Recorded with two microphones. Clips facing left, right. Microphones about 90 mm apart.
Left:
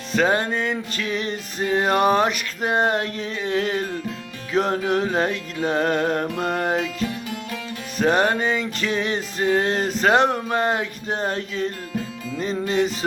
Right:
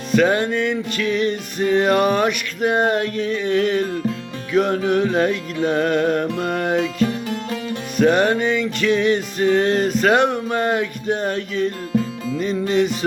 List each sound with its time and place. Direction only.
0.1 s music: 30° left (ahead or behind)
7.0 s music: 40° right (ahead or behind)
7.9 s music: 30° left (ahead or behind)